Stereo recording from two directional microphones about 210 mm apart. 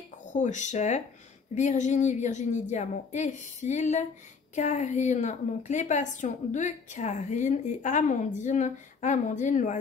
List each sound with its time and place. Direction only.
0.3 s a woman's voice: 35° left (ahead or behind)